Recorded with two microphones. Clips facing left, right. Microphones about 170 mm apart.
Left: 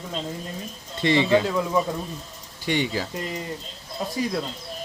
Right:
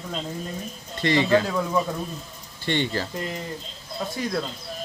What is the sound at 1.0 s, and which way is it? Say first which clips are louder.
Speech: left 1 dB; 20° left (ahead or behind).